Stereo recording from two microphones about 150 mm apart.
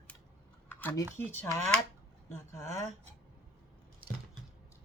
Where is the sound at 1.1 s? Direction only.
15° left (ahead or behind).